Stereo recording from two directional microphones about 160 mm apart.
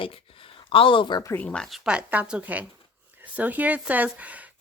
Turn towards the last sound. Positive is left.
turn(degrees=-10)  # may be behind; listen again after turning